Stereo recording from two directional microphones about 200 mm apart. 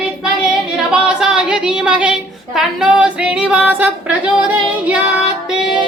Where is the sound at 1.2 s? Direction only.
5° right (ahead or behind).